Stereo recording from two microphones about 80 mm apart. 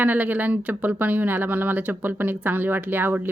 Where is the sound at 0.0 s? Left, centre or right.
Right.